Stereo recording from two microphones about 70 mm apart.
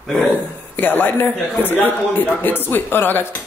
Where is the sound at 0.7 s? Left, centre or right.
Left.